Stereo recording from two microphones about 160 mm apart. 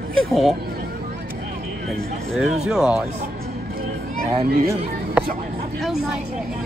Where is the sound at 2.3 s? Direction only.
Centre (ahead or behind).